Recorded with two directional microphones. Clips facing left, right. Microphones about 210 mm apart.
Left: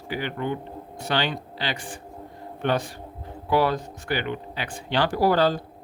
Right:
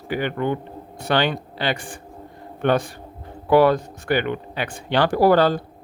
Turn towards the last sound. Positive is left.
turn(degrees=-60)  # may be behind; listen again after turning